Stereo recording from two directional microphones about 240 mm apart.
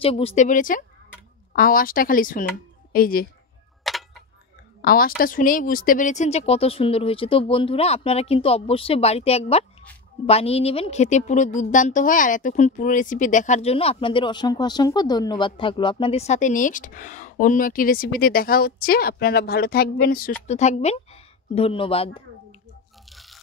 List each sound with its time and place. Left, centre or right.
0.0 s a woman's voice: left
3.8 s tick-tock: centre
4.8 s a woman's voice: left
23.0 s drip: centre